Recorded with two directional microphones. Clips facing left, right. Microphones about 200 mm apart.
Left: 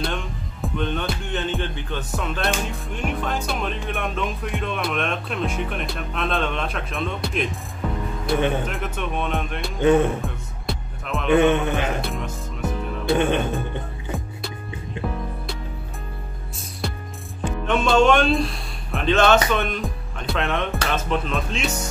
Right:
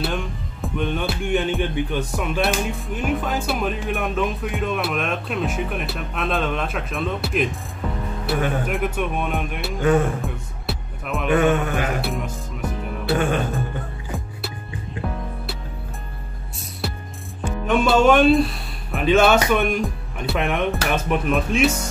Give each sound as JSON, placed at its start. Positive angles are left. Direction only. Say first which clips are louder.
{"t": 0.0, "sound": "music", "louder": "right 2 dB", "side_deg": -5}
{"t": 8.6, "sound": "speech", "louder": "right 5 dB", "side_deg": -10}
{"t": 9.8, "sound": "music", "louder": "left 2 dB", "side_deg": 25}
{"t": 10.2, "sound": "music", "louder": "right 1 dB", "side_deg": 0}
{"t": 11.2, "sound": "music", "louder": "left 1 dB", "side_deg": 25}
{"t": 13.1, "sound": "music", "louder": "left 1 dB", "side_deg": 25}
{"t": 16.8, "sound": "music", "louder": "even", "side_deg": -5}
{"t": 17.6, "sound": "speech", "louder": "right 1 dB", "side_deg": -5}